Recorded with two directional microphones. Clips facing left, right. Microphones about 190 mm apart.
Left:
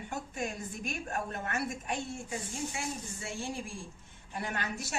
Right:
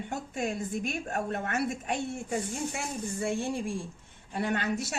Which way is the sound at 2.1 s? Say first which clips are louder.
Right 6 dB; 60° right (ahead or behind).